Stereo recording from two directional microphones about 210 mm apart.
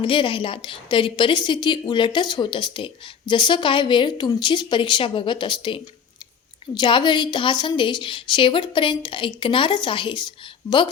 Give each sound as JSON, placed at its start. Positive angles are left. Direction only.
{"t": 0.0, "sound": "a woman's voice", "side_deg": 25}